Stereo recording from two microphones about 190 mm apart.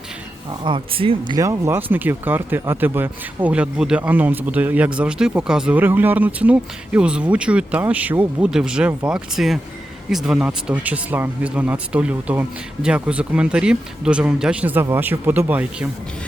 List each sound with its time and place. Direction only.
0.6 s speech: 25° right (ahead or behind)
1.4 s speech: 15° right (ahead or behind)